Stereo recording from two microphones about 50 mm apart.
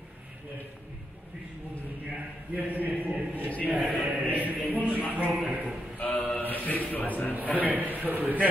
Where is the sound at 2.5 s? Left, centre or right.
Right.